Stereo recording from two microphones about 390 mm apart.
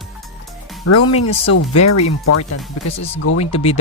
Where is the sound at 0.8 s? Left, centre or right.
Left.